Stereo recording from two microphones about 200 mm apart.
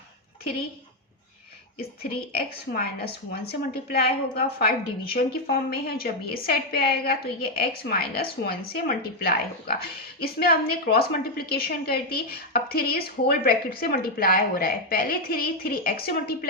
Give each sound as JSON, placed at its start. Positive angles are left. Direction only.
{"t": 2.3, "sound": "a woman's voice", "side_deg": 50}